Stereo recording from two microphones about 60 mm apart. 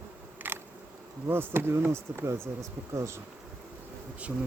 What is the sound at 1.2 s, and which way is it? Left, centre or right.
Speech, right.